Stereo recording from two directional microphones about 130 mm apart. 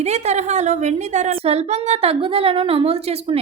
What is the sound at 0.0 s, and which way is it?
A woman's voice, 55° right (ahead or behind).